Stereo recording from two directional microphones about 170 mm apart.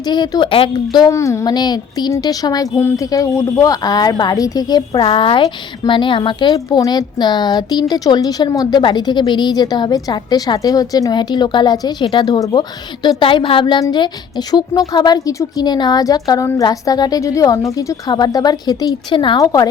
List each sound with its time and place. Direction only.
0.0 s a woman's voice: 25° left (ahead or behind)